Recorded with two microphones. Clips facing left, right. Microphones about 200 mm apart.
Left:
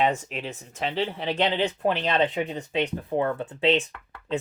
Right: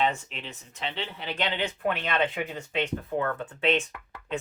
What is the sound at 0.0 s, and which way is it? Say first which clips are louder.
Speech: left 4 dB; 45° left (ahead or behind).